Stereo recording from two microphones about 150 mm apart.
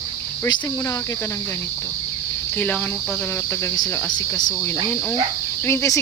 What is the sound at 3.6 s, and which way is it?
Speech, 20° left (ahead or behind).